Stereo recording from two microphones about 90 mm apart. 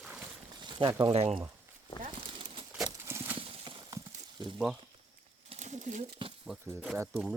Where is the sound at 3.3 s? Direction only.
85° right; by 3.9 s 65° right (ahead or behind).